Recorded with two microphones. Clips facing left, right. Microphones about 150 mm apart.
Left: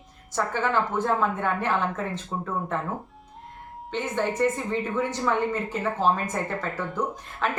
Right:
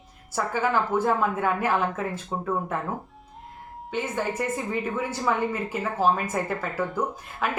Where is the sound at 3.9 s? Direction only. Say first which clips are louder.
Left 1 dB; 10° right (ahead or behind).